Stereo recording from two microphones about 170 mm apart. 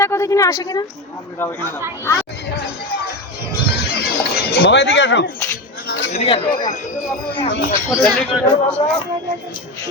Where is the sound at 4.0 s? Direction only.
65° left (ahead or behind); by 5.2 s 90° left.